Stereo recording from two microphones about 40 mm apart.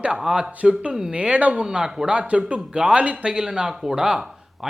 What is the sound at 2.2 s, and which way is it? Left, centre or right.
A woman's voice, right.